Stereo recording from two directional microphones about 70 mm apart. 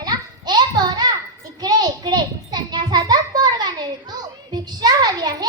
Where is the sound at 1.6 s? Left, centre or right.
Right.